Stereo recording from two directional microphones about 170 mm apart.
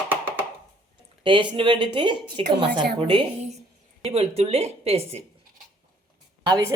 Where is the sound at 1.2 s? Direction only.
30° right (ahead or behind).